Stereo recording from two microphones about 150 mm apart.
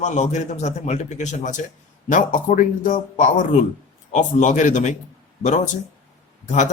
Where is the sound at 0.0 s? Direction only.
50° left (ahead or behind).